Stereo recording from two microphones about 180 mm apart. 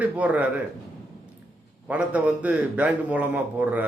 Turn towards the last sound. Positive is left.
turn(degrees=-10)  # may be behind; listen again after turning